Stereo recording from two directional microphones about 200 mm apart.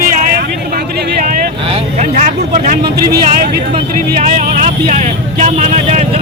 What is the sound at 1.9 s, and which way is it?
Speech, 40° right (ahead or behind).